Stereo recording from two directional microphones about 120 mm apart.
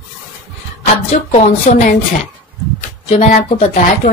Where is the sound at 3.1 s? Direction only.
75° left (ahead or behind).